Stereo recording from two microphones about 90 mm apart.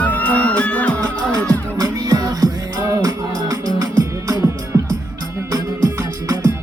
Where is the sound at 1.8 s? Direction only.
45° right (ahead or behind).